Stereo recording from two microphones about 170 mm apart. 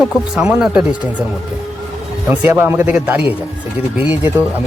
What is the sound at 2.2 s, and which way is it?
Speech, 10° right (ahead or behind).